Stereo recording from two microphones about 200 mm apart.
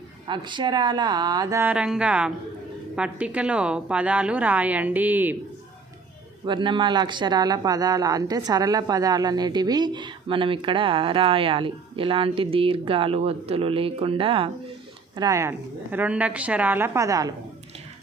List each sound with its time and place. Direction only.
0.3 s a woman's voice: 25° right (ahead or behind)
6.4 s a woman's voice: 25° right (ahead or behind)